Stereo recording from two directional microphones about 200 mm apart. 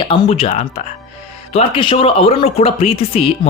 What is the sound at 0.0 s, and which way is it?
Speech, 30° left (ahead or behind).